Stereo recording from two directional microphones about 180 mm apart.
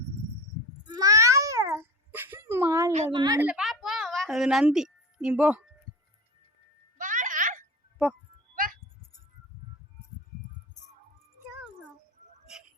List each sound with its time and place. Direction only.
0.9 s babbling: 20° right (ahead or behind)
3.1 s a woman's voice: 25° right (ahead or behind)
3.4 s a sound: 5° right (ahead or behind)
7.0 s music: 45° right (ahead or behind)